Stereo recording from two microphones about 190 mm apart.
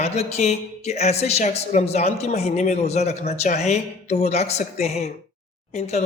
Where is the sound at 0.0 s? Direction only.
35° left (ahead or behind).